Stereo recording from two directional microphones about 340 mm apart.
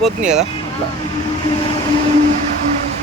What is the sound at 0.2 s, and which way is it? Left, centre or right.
Speech, right.